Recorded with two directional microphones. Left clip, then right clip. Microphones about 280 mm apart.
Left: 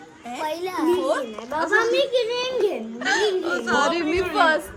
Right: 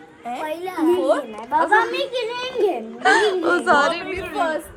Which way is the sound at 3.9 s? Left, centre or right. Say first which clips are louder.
Left 3 dB; left.